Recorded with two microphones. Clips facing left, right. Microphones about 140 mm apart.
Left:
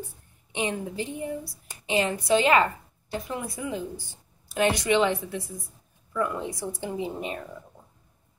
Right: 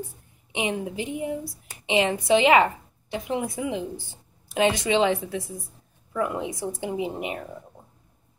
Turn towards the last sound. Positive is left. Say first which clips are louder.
# right 2 dB
turn(degrees=-15)  # may be behind; listen again after turning